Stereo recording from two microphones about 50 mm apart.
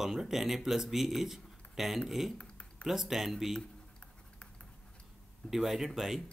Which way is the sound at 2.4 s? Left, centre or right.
Left.